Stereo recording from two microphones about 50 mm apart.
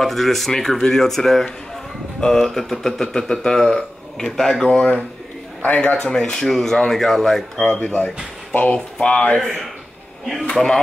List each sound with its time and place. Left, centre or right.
0.0 s speech: centre
4.6 s speech: left; by 7.6 s centre
7.8 s speech: centre
10.5 s speech: centre